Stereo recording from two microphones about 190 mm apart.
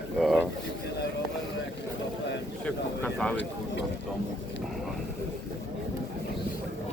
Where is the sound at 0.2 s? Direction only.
Centre (ahead or behind).